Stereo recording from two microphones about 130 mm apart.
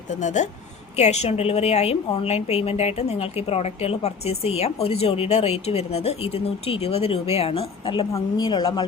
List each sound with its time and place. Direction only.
0.1 s speech: 70° left (ahead or behind)
0.9 s a woman's voice: 55° left (ahead or behind)
8.1 s speech: 35° left (ahead or behind)